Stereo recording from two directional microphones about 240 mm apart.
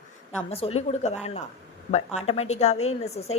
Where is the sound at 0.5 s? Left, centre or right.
Left.